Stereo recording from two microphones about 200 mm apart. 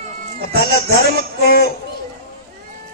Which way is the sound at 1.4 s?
50° left (ahead or behind).